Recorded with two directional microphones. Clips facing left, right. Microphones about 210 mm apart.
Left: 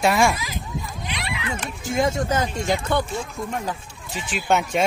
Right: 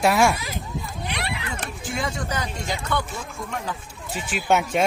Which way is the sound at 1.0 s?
60° right (ahead or behind).